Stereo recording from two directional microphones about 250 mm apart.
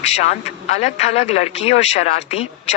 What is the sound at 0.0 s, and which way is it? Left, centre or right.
Speech, left.